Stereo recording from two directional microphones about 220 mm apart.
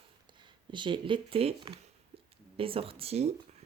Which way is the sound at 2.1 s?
25° right (ahead or behind).